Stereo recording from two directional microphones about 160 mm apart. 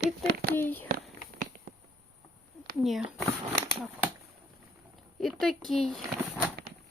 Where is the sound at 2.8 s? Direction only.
Centre (ahead or behind).